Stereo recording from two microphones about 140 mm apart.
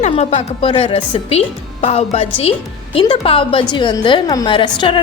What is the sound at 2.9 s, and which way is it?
A woman's voice, 40° left (ahead or behind).